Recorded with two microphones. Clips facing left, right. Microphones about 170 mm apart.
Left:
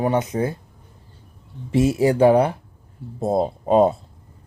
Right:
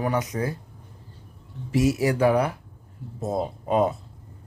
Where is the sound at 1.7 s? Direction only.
30° left (ahead or behind).